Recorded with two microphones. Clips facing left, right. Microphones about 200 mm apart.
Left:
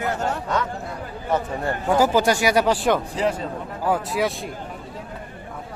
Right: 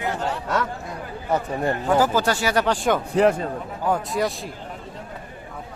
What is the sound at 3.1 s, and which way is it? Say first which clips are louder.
Speech: right 5 dB; 55° right (ahead or behind).